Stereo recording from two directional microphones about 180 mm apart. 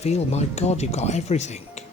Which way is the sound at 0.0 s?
35° left (ahead or behind).